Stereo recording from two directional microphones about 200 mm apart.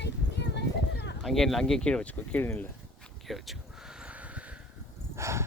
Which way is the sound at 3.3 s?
Centre (ahead or behind).